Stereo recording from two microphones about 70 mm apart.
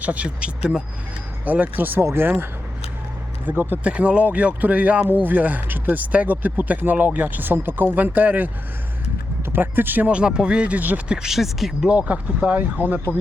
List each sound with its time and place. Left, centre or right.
0.0 s speech: centre
3.8 s speech: centre
11.2 s speech: centre
11.9 s speech: centre
13.1 s speech: left